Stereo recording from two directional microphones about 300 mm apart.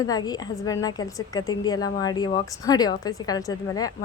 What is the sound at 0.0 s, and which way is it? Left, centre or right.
A woman's voice, centre.